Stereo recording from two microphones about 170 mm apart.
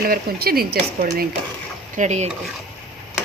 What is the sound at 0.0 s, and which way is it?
Speech, 60° right (ahead or behind).